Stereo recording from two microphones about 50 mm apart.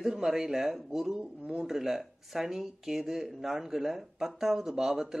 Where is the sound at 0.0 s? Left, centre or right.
Centre.